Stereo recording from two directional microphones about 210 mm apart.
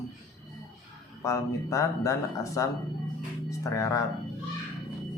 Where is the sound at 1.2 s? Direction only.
15° left (ahead or behind).